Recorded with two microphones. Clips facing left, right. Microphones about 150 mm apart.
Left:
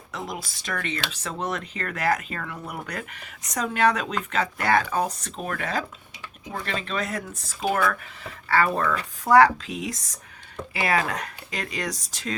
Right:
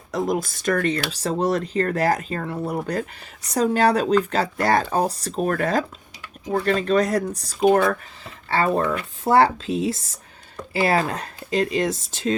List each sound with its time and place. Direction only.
0.1 s speech: 45° right (ahead or behind)
7.9 s speech: 25° right (ahead or behind)